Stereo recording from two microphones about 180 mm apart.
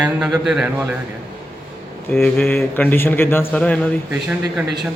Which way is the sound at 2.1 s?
10° left (ahead or behind).